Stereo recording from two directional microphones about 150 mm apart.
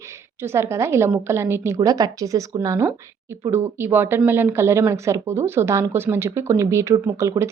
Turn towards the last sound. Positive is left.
turn(degrees=-20)  # may be behind; listen again after turning